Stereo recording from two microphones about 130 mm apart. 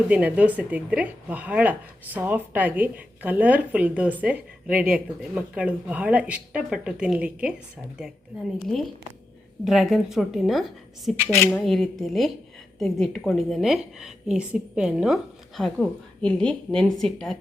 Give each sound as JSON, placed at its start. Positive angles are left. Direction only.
{"t": 0.1, "sound": "speech", "side_deg": -10}
{"t": 8.6, "sound": "a woman's voice", "side_deg": 5}